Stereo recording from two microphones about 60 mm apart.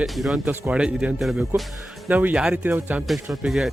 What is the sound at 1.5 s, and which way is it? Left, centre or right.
Speech, right.